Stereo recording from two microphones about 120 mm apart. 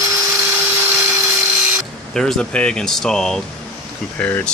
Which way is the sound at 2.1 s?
5° left (ahead or behind).